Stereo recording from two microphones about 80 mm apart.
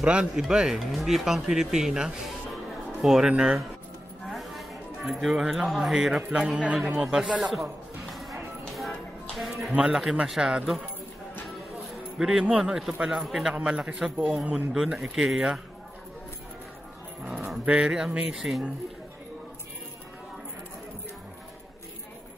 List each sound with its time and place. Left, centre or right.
0.0 s speech: centre
4.3 s speech: centre
8.1 s music: centre
9.4 s a sound: centre
9.7 s speech: centre
11.4 s music: centre
13.0 s speech: centre
13.6 s speech: centre
14.7 s speech: centre
17.2 s speech: centre